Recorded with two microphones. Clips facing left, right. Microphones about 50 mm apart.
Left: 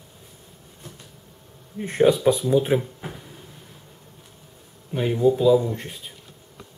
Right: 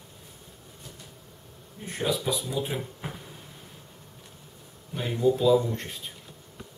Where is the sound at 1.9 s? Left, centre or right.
Left.